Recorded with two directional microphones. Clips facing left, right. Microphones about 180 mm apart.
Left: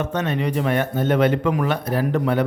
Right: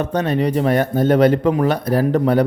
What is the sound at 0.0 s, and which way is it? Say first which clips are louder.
A man's voice: right 4 dB; 35° right (ahead or behind).